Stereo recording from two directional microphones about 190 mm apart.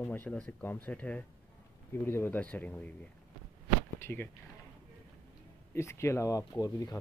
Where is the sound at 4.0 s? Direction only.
10° left (ahead or behind).